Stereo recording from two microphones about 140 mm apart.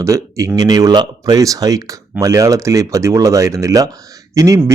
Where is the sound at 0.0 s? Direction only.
20° right (ahead or behind).